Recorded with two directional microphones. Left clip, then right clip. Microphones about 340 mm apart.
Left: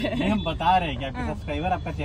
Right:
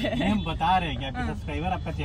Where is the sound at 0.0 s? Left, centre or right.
Centre.